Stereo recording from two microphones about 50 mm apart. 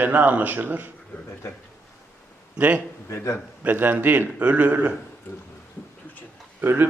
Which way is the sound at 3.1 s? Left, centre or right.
Left.